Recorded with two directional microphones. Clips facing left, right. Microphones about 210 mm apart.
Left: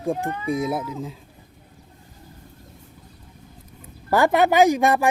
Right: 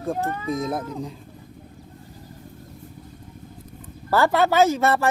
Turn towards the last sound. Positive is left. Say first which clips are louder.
# left 2 dB
turn(degrees=15)  # may be behind; listen again after turning